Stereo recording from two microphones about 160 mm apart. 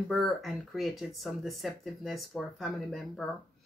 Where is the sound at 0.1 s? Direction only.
Centre (ahead or behind).